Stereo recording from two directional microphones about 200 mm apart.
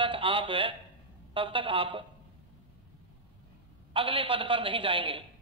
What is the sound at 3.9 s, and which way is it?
A man's voice, 25° right (ahead or behind).